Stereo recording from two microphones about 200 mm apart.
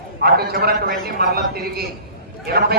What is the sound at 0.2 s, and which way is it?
A man's voice, 50° right (ahead or behind).